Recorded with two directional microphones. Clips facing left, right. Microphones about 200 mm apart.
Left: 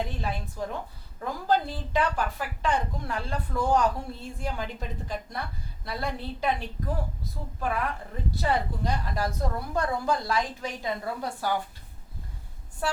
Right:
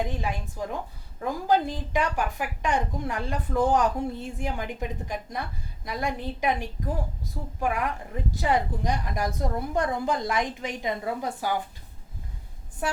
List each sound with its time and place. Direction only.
0.0 s a woman's voice: 15° right (ahead or behind)
12.8 s a woman's voice: 15° right (ahead or behind)